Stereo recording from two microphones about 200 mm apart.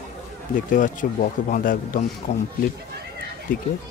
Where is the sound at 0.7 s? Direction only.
40° left (ahead or behind).